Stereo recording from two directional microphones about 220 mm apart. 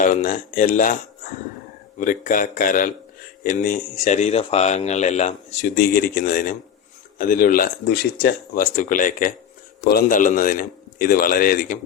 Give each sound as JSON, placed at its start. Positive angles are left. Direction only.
{"t": 0.0, "sound": "speech", "side_deg": 35}